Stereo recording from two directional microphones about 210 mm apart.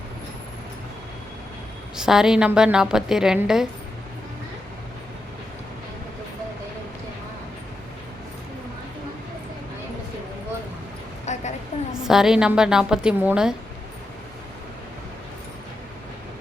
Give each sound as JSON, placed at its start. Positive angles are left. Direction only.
{"t": 2.0, "sound": "a woman's voice", "side_deg": 0}
{"t": 11.3, "sound": "a sound", "side_deg": 35}
{"t": 12.0, "sound": "a woman's voice", "side_deg": 0}